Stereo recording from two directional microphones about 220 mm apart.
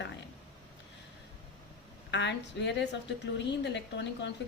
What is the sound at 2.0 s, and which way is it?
Speech, 55° left (ahead or behind).